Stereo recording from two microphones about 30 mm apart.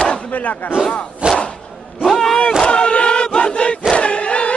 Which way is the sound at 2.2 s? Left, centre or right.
Centre.